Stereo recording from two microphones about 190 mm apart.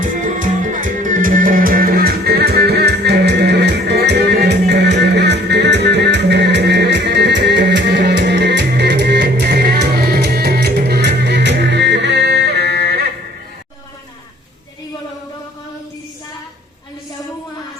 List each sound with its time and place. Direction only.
0.0 s music: 45° right (ahead or behind)